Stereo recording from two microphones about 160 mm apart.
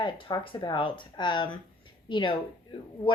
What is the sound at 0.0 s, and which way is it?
Speech, 30° left (ahead or behind).